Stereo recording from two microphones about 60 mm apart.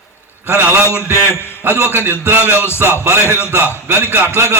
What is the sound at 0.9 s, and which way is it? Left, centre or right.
A man's voice, left.